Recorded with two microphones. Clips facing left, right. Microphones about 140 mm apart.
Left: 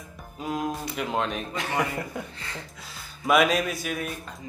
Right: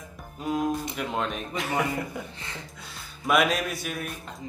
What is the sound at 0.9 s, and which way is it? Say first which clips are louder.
Speech: left 2 dB; centre (ahead or behind).